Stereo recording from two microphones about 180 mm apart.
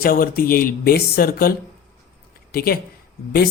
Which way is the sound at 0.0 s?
55° left (ahead or behind).